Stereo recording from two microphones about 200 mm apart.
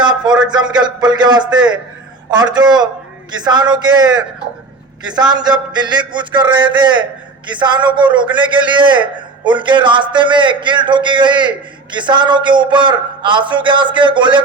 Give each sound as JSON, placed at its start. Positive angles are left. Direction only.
{"t": 0.0, "sound": "a man's voice", "side_deg": -20}